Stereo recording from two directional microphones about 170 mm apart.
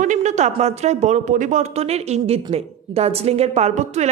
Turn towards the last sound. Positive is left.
turn(degrees=-45)  # may be behind; listen again after turning